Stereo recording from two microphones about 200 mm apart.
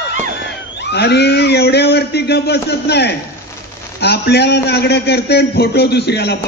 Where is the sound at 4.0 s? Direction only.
55° left (ahead or behind).